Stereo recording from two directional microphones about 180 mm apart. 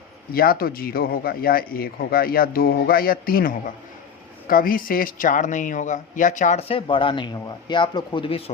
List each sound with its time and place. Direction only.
0.3 s speech: 55° left (ahead or behind); by 8.5 s 30° left (ahead or behind)